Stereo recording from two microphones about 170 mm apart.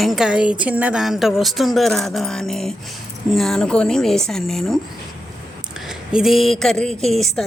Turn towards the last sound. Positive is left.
turn(degrees=0)  # may be behind; listen again after turning